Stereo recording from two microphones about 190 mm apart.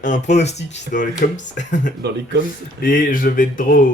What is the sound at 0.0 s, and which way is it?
Speech, 40° left (ahead or behind).